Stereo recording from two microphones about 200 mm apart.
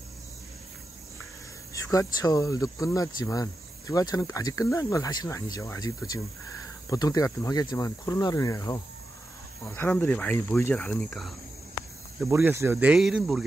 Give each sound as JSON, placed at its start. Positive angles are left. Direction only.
{"t": 1.7, "sound": "speech", "side_deg": 15}
{"t": 12.3, "sound": "speech", "side_deg": -15}